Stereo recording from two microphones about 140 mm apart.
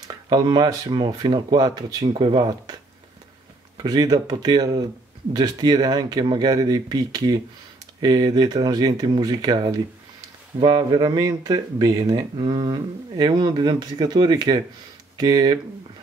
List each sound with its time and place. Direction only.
0.1 s speech: 30° right (ahead or behind)